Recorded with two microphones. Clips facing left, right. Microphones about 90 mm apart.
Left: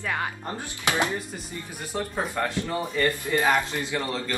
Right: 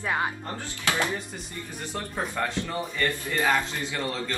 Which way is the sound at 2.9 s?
15° left (ahead or behind).